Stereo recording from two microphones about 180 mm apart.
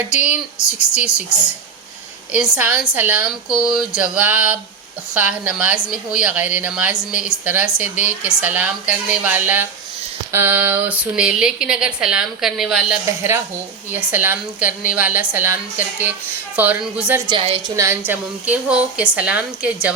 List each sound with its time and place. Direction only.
0.8 s a woman's voice: 5° right (ahead or behind)
17.2 s a woman's voice: 30° right (ahead or behind)
17.7 s speech: 15° right (ahead or behind)